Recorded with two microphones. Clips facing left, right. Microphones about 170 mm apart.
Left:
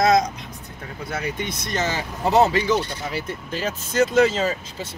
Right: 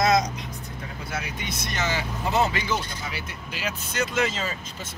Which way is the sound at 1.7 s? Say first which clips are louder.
Left 2 dB; 45° left (ahead or behind).